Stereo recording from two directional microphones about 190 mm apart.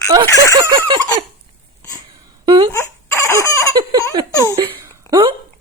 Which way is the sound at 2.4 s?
25° right (ahead or behind).